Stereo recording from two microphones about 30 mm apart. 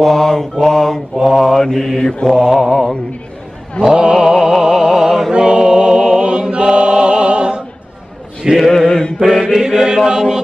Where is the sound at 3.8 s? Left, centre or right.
Right.